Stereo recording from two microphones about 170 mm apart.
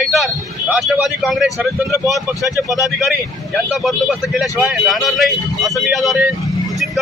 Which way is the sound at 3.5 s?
Centre (ahead or behind).